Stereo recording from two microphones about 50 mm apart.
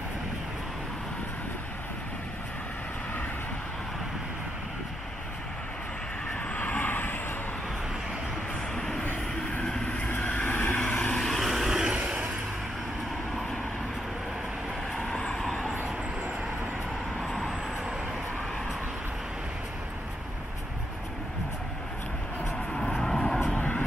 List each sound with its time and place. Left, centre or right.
6.5 s vehicle: left
8.7 s vehicle: centre
9.8 s vehicle: left
11.1 s vehicle: centre
11.7 s vehicle: centre
15.2 s vehicle: centre
22.8 s vehicle: centre
23.5 s vehicle: left